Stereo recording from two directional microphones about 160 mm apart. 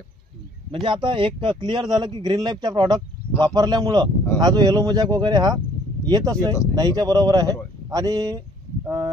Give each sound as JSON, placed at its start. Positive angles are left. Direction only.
{"t": 0.8, "sound": "speech", "side_deg": -30}